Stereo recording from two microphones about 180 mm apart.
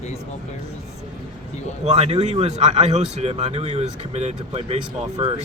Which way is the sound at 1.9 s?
35° right (ahead or behind).